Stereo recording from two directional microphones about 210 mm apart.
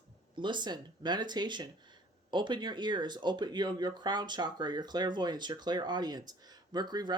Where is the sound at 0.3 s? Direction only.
20° right (ahead or behind).